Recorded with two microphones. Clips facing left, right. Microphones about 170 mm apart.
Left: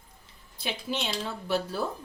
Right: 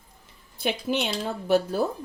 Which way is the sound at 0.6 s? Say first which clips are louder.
Right 6 dB; 55° right (ahead or behind).